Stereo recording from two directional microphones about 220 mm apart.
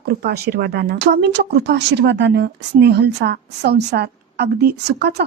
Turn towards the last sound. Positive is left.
turn(degrees=-50)  # may be behind; listen again after turning